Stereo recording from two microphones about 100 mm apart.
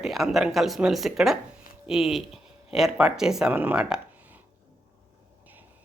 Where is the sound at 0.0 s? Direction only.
Centre (ahead or behind).